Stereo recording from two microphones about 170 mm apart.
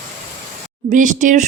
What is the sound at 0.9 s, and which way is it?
Speech, 50° right (ahead or behind).